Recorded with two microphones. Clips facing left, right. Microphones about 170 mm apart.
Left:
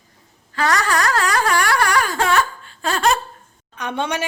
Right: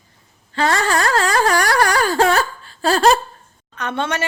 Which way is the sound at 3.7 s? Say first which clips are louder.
Right 1 dB; 10° left (ahead or behind).